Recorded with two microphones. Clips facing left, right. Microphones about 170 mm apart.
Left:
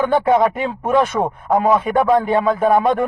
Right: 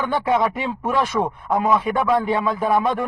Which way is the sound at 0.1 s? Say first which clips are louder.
Left 5 dB; 50° left (ahead or behind).